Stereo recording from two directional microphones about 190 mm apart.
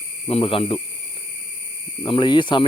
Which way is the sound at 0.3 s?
30° left (ahead or behind).